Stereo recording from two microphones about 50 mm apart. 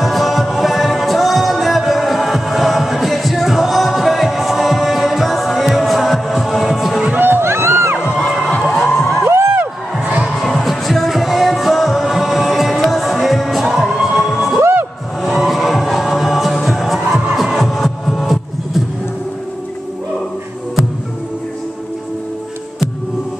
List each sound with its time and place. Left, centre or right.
0.0 s music: centre
7.2 s a sound: right
8.5 s music: centre
8.7 s a sound: centre
9.2 s music: right
10.4 s music: centre
14.6 s music: right
15.2 s music: centre